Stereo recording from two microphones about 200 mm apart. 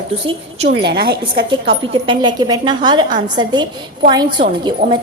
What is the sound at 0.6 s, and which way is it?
Speech, 60° right (ahead or behind).